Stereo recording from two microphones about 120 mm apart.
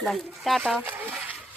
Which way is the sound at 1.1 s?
10° right (ahead or behind).